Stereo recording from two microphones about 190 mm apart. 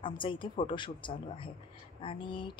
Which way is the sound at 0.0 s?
25° left (ahead or behind).